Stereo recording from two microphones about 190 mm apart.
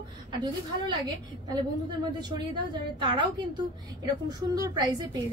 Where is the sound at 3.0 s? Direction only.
25° right (ahead or behind).